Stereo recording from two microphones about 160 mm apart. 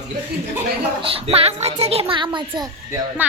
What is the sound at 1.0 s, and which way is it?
A child's voice, 35° right (ahead or behind).